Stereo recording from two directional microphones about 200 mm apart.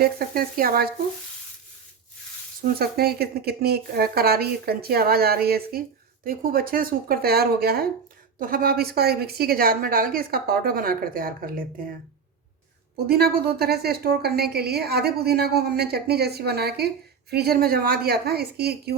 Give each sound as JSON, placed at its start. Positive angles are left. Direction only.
{"t": 0.0, "sound": "a woman's voice", "side_deg": -50}
{"t": 2.6, "sound": "a woman's voice", "side_deg": -50}
{"t": 13.1, "sound": "a woman's voice", "side_deg": -50}